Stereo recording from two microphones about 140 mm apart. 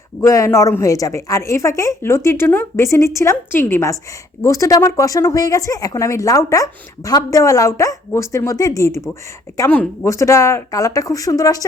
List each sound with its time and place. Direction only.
0.2 s speech: 20° left (ahead or behind)
9.1 s speech: 10° left (ahead or behind)